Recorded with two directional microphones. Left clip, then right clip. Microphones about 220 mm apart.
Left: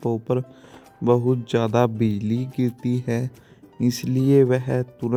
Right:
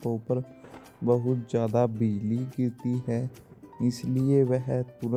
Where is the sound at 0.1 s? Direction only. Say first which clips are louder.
Left 5 dB; 35° left (ahead or behind).